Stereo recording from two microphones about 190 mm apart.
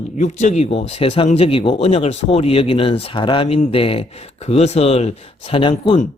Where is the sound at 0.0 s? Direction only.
40° left (ahead or behind).